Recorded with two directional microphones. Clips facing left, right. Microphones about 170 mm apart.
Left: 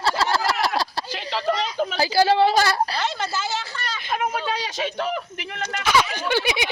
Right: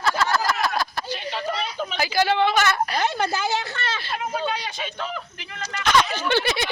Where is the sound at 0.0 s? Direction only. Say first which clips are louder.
Left 1 dB; 30° left (ahead or behind).